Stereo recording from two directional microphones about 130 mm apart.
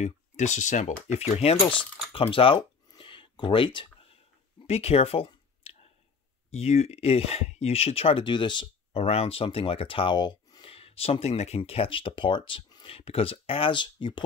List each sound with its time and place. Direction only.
0.0 s speech: 65° left (ahead or behind); by 2.6 s 45° left (ahead or behind)
2.9 s a sound: 40° left (ahead or behind)
4.6 s speech: 55° left (ahead or behind)
5.6 s a sound: 50° left (ahead or behind)
6.5 s speech: 55° left (ahead or behind); by 9.0 s 35° left (ahead or behind)
9.0 s speech: 55° left (ahead or behind)